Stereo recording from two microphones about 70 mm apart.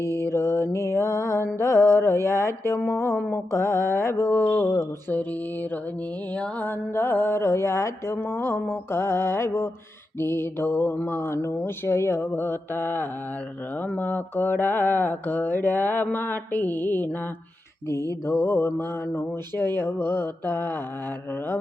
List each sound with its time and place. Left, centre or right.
0.0 s mantra: left
1.5 s music: left
2.9 s speech: left
3.2 s mantra: left
6.3 s mantra: centre
6.7 s speech: left
13.8 s mantra: left
18.4 s speech: left